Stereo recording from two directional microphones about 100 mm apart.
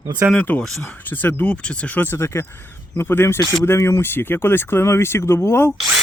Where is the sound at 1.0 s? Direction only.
20° left (ahead or behind).